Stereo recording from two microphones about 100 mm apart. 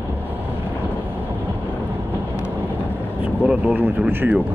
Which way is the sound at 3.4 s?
15° right (ahead or behind).